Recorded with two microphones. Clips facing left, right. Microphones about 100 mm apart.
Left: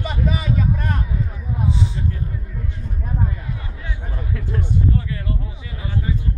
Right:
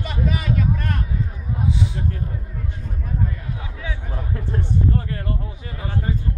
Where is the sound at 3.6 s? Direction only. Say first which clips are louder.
Right 2 dB; 90° right.